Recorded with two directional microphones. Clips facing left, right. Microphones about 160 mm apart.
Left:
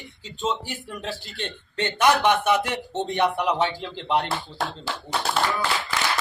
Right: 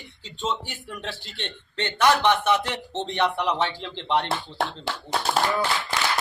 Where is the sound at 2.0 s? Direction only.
15° left (ahead or behind).